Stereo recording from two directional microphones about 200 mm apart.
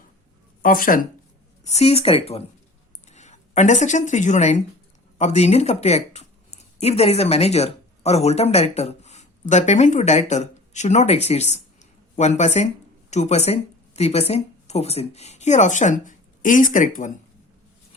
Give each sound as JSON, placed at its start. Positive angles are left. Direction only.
{"t": 0.6, "sound": "speech", "side_deg": 45}
{"t": 1.6, "sound": "speech", "side_deg": 30}